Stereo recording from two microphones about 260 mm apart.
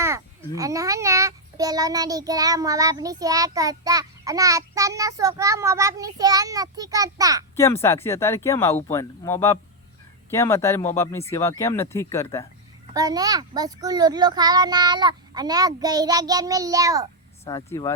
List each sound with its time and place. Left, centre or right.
0.0 s a child's voice: centre
7.5 s speech: centre
12.9 s a child's voice: centre
17.4 s speech: centre